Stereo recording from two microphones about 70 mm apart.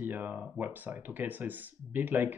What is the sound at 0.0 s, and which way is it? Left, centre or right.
Speech, right.